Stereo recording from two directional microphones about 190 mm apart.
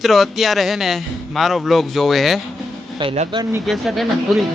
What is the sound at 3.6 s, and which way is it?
Speech, centre (ahead or behind).